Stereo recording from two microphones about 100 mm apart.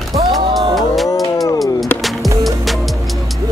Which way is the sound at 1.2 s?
35° left (ahead or behind).